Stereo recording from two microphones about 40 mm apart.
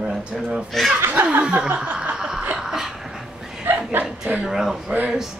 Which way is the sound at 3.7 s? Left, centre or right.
Right.